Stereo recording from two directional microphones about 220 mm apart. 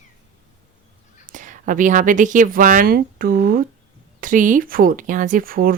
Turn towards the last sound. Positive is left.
turn(degrees=-40)  # may be behind; listen again after turning